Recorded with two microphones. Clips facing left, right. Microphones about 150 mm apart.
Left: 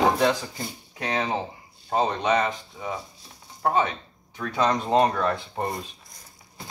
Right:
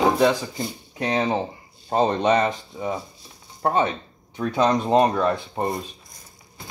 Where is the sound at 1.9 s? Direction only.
35° right (ahead or behind); by 5.8 s 15° right (ahead or behind).